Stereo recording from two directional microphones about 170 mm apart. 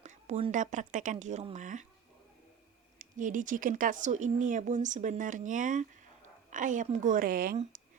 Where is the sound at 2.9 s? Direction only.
50° right (ahead or behind).